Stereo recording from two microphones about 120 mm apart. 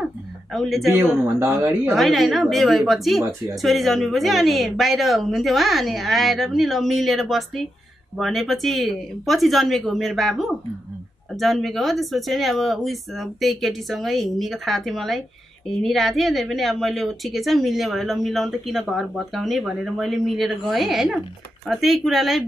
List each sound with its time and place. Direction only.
0.0 s a sound: centre (ahead or behind)
1.2 s speech: 20° right (ahead or behind)
1.9 s a woman's voice: centre (ahead or behind)